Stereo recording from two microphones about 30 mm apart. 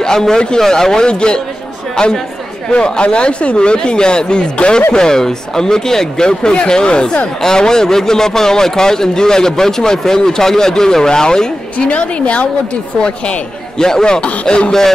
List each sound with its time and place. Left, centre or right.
0.0 s a man's voice: left
1.0 s speech: left
2.8 s a man's voice: left
6.2 s a man's voice: left
11.9 s a woman's voice: left
13.7 s a man's voice: left
14.2 s speech: left